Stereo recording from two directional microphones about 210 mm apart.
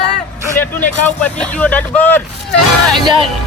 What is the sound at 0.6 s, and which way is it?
Speech, 10° left (ahead or behind).